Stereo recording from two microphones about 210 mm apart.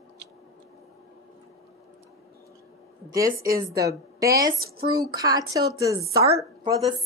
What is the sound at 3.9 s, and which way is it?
A woman's voice, 15° right (ahead or behind).